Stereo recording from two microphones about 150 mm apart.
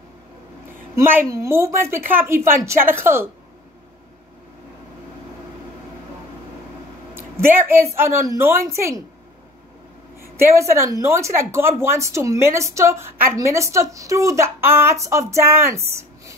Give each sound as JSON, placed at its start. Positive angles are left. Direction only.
{"t": 0.9, "sound": "a woman's voice", "side_deg": -15}
{"t": 7.2, "sound": "a woman's voice", "side_deg": -15}
{"t": 10.3, "sound": "speech", "side_deg": -20}